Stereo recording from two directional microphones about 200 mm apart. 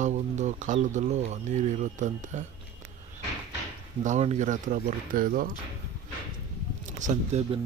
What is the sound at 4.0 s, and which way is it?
Speech, 35° right (ahead or behind).